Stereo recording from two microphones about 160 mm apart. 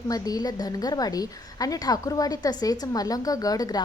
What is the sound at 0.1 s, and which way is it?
A woman's voice, 25° left (ahead or behind).